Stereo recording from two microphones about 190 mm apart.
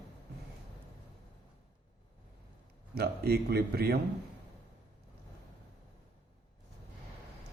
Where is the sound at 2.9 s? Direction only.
55° right (ahead or behind).